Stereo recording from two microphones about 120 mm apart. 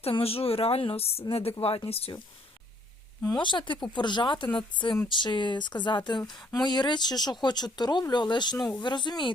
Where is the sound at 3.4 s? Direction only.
40° left (ahead or behind).